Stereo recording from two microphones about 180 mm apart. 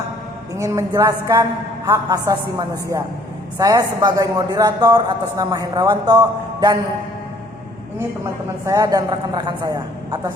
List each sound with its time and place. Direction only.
0.5 s a woman's voice: 15° right (ahead or behind)
8.6 s speech: 20° right (ahead or behind)